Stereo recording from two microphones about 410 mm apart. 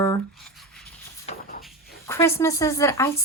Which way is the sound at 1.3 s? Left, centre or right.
Centre.